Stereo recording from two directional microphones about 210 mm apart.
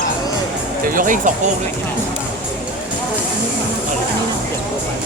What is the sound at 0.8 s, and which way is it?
Speech, 40° right (ahead or behind).